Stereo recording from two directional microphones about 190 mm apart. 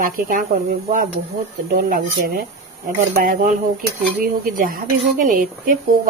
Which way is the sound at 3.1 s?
45° right (ahead or behind).